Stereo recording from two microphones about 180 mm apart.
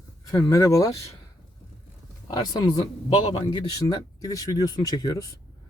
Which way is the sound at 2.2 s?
25° left (ahead or behind).